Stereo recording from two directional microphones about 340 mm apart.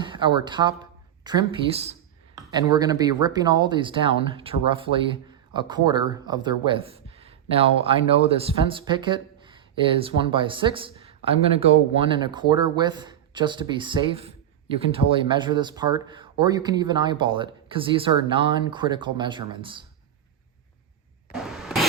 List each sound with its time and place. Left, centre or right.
0.0 s speech: centre